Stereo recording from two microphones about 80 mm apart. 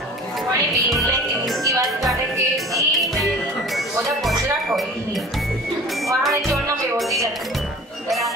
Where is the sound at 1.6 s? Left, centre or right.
Right.